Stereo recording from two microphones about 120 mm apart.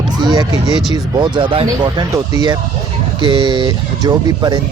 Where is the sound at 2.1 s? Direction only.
35° right (ahead or behind).